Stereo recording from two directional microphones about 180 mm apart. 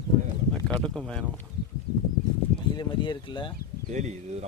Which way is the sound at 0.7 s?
Centre (ahead or behind).